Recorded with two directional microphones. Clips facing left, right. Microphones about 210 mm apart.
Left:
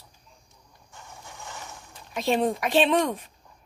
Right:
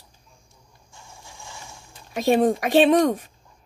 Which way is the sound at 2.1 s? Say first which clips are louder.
Right 5 dB; 45° right (ahead or behind).